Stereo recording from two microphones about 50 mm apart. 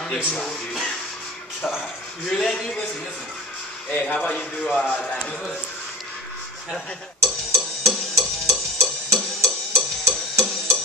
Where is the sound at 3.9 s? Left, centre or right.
Left.